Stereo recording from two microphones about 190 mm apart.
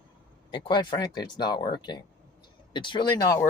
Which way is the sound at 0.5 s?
25° left (ahead or behind).